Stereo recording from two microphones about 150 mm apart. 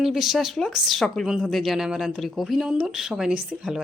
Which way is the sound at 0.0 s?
Centre (ahead or behind).